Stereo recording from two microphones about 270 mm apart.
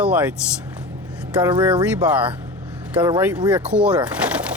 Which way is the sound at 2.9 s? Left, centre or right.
Centre.